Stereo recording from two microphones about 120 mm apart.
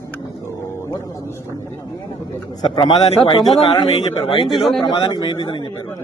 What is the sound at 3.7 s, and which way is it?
Speech, 45° left (ahead or behind).